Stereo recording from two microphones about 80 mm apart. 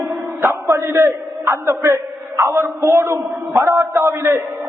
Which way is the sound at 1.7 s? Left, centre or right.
Right.